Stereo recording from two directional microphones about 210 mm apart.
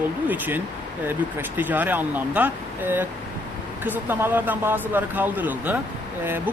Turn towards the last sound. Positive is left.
turn(degrees=-10)  # may be behind; listen again after turning